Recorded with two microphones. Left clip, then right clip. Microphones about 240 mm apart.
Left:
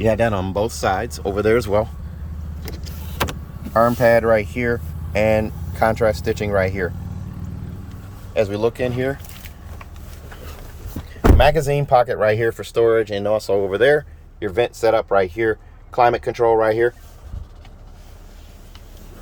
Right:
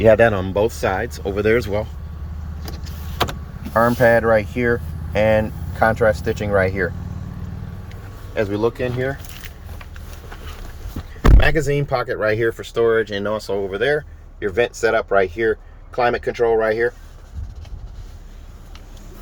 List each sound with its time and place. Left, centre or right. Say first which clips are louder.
0.0 s speech: right 5 dB; centre
3.7 s speech: even; centre
8.4 s speech: left 1 dB; centre
11.3 s speech: left 3 dB; centre
14.3 s speech: right 1 dB; left
16.2 s speech: left 1 dB; centre